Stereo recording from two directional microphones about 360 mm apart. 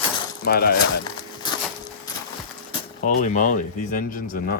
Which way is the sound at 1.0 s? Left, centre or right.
Centre.